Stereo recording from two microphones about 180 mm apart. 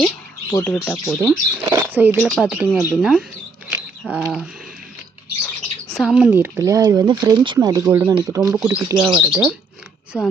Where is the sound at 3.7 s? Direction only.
5° right (ahead or behind).